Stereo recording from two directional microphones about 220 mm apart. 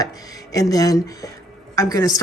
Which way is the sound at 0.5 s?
15° left (ahead or behind).